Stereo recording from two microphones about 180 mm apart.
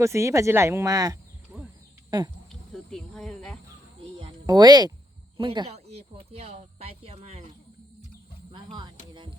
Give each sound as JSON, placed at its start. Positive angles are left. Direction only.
{"t": 0.0, "sound": "speech", "side_deg": -15}
{"t": 2.5, "sound": "cricket", "side_deg": 5}
{"t": 4.2, "sound": "a sound", "side_deg": -20}
{"t": 5.4, "sound": "speech", "side_deg": -30}
{"t": 8.5, "sound": "music", "side_deg": -25}